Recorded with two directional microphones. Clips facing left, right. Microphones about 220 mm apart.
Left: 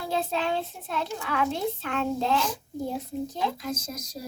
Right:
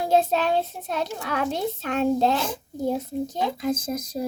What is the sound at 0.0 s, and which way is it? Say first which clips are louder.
A child's voice: right 7 dB; 45° right (ahead or behind).